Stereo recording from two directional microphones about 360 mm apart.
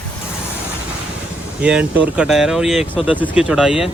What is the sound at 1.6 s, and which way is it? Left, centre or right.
Speech, centre.